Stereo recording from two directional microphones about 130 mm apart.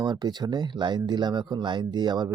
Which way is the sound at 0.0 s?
35° right (ahead or behind).